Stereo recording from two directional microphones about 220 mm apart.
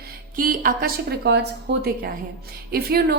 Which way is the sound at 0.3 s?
40° right (ahead or behind).